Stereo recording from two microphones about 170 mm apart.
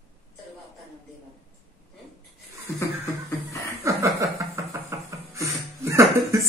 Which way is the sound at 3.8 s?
15° right (ahead or behind).